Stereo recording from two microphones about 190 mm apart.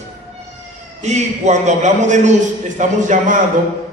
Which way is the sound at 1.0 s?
40° right (ahead or behind).